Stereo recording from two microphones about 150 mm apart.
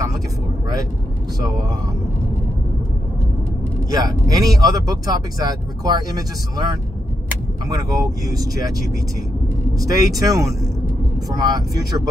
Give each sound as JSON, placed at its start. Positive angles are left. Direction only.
{"t": 3.9, "sound": "speech", "side_deg": -25}
{"t": 7.7, "sound": "speech", "side_deg": -25}
{"t": 9.8, "sound": "speech", "side_deg": -20}